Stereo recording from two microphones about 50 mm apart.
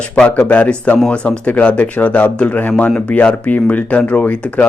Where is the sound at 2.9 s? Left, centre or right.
Left.